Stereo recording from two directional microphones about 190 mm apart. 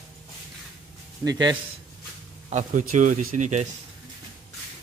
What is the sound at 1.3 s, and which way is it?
Speech, 20° right (ahead or behind).